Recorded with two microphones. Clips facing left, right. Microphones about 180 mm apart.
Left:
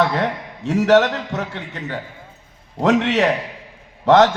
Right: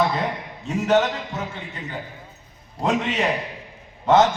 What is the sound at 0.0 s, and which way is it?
Speech, 70° left (ahead or behind).